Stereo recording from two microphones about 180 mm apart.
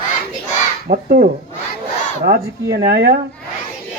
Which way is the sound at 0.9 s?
55° right (ahead or behind).